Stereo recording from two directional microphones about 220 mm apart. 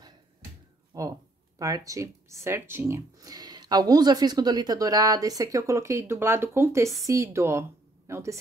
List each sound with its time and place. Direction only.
0.9 s speech: 15° right (ahead or behind)